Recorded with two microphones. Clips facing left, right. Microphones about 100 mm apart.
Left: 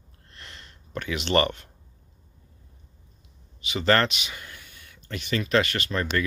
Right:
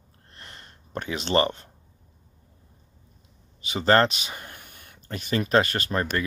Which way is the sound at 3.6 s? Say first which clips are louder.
Right 2 dB; 35° right (ahead or behind).